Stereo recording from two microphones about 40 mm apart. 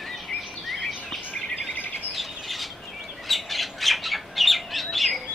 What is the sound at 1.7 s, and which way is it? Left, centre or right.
Bird, left.